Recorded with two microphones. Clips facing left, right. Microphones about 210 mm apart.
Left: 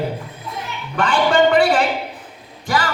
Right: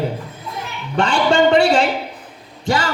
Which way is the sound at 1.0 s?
25° right (ahead or behind).